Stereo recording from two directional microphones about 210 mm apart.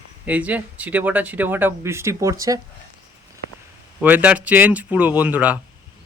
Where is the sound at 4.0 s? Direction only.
10° right (ahead or behind).